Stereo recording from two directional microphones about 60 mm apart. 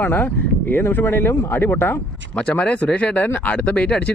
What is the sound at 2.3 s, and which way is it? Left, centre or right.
Speech, centre.